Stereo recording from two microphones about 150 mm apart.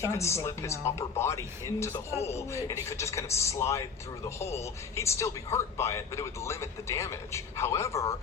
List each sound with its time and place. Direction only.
0.0 s speech: 20° left (ahead or behind)
2.1 s a man's voice: 45° left (ahead or behind)
2.5 s a man's voice: 20° left (ahead or behind)